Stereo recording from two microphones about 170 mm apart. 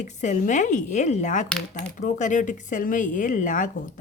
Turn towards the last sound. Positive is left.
turn(degrees=50)  # may be behind; listen again after turning